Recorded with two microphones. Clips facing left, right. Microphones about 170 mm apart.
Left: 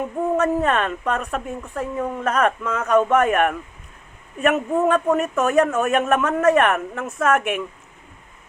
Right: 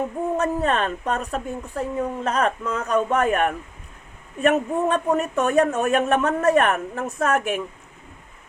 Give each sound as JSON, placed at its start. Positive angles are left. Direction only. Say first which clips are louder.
{"t": 0.3, "sound": "speech", "louder": "left 2 dB", "side_deg": -35}